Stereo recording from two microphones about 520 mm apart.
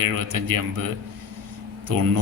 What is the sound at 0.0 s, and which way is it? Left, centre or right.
Speech, right.